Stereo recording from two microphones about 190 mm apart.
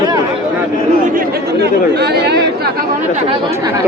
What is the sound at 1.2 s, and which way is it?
Speech, 60° right (ahead or behind).